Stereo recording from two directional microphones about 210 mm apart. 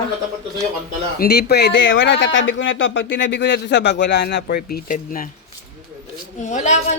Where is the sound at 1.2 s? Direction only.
50° left (ahead or behind).